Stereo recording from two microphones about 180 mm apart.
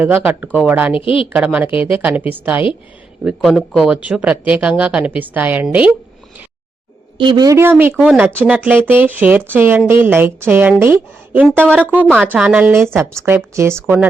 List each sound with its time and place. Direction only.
0.0 s speech: 10° right (ahead or behind)
0.9 s a woman's voice: 30° left (ahead or behind)
1.3 s speech: 5° right (ahead or behind)
7.2 s speech: 25° right (ahead or behind)